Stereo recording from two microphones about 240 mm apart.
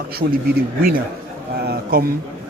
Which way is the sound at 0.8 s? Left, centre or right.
Right.